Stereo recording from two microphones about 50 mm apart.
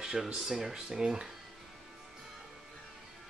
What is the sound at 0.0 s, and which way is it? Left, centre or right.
Speech, centre.